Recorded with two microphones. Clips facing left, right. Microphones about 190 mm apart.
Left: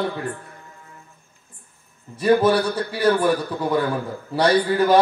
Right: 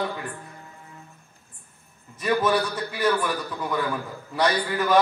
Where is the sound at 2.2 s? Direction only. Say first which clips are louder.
Left 6 dB; 30° left (ahead or behind).